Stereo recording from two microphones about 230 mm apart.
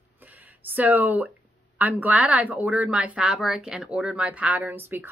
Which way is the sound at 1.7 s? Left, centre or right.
Centre.